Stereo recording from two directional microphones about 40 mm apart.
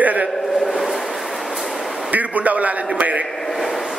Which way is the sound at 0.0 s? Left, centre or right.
Right.